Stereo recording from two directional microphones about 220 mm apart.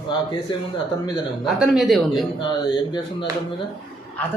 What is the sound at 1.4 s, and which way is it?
Speech, centre (ahead or behind).